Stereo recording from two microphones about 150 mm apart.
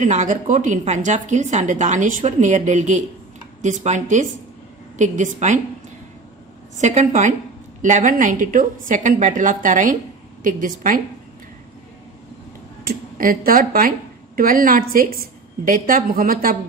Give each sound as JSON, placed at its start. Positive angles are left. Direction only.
{"t": 0.0, "sound": "a woman's voice", "side_deg": -55}
{"t": 6.7, "sound": "a woman's voice", "side_deg": -55}
{"t": 13.1, "sound": "a woman's voice", "side_deg": -70}